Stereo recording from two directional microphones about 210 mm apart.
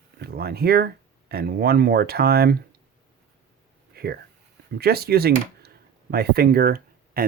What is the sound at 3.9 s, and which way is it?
Speech, 50° right (ahead or behind).